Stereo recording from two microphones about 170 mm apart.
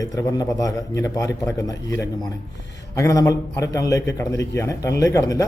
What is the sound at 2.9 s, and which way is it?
A man's voice, 20° left (ahead or behind).